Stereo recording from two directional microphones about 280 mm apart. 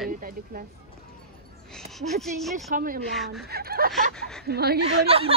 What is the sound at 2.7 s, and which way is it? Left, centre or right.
Speech, right.